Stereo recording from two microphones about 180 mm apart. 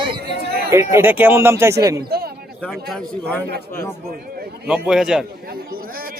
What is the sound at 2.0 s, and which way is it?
Speech, 60° right (ahead or behind).